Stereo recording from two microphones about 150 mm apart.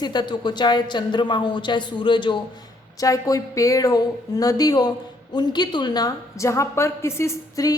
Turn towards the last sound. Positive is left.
turn(degrees=25)  # may be behind; listen again after turning